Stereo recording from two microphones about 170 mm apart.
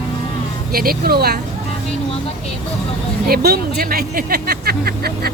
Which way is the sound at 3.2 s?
65° right (ahead or behind).